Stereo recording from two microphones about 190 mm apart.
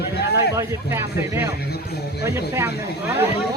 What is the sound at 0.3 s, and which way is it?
A man's voice, 15° right (ahead or behind).